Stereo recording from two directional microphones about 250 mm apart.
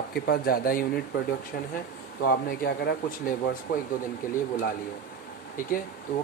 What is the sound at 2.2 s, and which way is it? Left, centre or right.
Speech, left.